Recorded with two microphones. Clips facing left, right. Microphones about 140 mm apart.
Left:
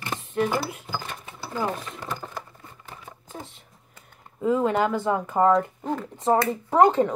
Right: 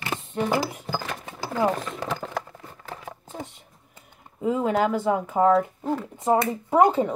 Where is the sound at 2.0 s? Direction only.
90° right.